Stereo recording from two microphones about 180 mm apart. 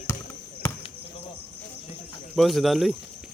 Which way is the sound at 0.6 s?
15° left (ahead or behind).